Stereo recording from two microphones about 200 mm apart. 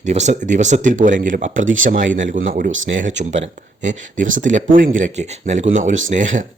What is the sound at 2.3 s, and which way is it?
Speech, 45° right (ahead or behind).